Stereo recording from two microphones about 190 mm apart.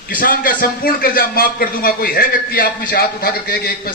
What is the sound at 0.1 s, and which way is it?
A man's voice, 45° left (ahead or behind).